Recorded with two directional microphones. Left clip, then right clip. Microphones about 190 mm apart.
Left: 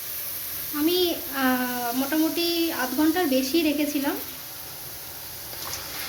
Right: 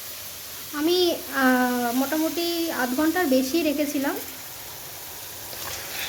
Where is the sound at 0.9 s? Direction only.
50° right (ahead or behind).